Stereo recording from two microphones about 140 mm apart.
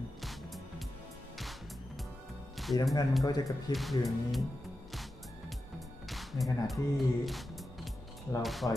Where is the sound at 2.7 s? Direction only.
25° left (ahead or behind).